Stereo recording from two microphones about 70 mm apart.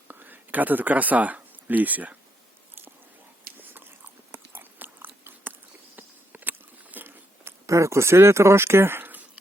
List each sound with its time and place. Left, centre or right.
0.1 s speech: right
4.3 s biting: right
6.0 s a sound: right
7.7 s speech: right